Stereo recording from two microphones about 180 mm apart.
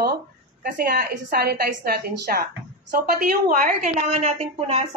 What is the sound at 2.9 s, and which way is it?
A woman's voice, 45° right (ahead or behind).